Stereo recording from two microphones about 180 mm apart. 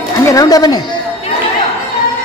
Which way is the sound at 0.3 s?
20° left (ahead or behind).